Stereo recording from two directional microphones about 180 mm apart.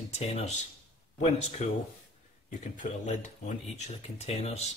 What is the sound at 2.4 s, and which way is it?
Speech, 45° left (ahead or behind).